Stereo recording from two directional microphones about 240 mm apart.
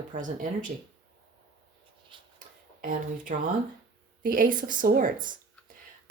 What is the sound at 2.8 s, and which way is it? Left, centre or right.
Speech, right.